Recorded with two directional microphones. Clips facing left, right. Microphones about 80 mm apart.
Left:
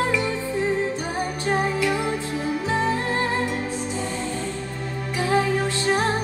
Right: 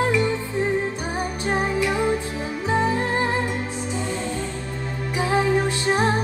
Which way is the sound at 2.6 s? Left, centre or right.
Right.